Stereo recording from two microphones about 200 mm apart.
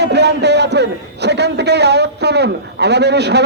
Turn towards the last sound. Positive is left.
turn(degrees=-55)  # may be behind; listen again after turning